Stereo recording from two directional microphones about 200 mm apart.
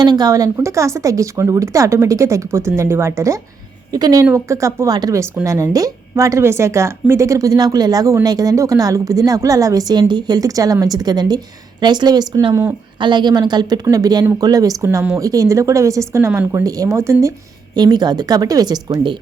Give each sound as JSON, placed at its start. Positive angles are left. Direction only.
{"t": 0.0, "sound": "speech", "side_deg": -20}